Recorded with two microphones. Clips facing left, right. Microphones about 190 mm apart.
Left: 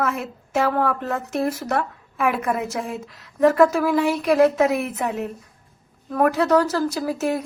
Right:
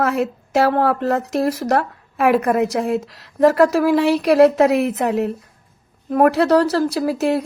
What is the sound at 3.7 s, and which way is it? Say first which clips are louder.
Speech: right 4 dB; 75° right (ahead or behind).